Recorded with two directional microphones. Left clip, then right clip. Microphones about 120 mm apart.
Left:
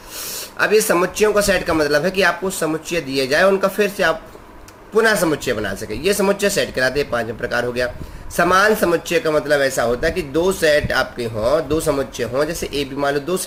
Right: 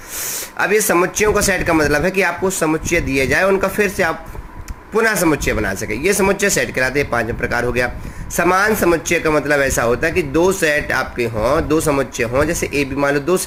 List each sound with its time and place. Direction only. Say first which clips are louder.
0.6 s speech: even; 55° right (ahead or behind)